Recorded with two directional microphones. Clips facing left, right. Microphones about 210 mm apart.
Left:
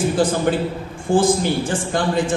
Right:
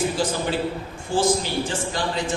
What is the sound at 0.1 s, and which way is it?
A man's voice, 50° left (ahead or behind).